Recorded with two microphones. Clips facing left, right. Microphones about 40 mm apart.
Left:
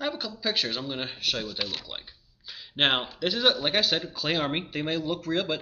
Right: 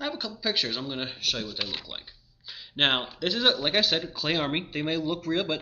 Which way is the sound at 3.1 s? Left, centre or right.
Centre.